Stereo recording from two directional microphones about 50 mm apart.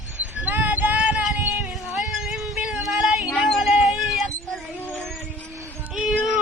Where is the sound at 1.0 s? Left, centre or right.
Right.